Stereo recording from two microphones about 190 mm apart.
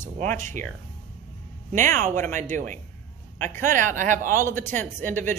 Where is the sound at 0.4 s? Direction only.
40° right (ahead or behind).